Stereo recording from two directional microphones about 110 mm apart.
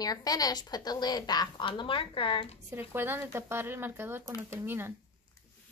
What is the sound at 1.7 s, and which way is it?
Speech, 50° left (ahead or behind).